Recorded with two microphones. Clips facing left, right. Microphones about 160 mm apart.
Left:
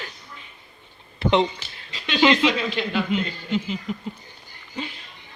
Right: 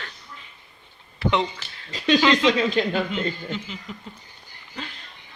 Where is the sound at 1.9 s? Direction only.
45° right (ahead or behind).